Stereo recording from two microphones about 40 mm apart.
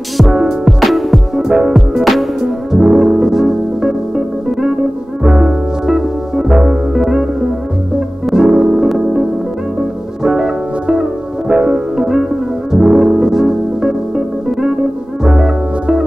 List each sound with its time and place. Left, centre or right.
0.5 s music: centre
2.4 s music: centre
8.4 s music: centre
10.2 s music: centre
10.9 s music: right
12.0 s music: centre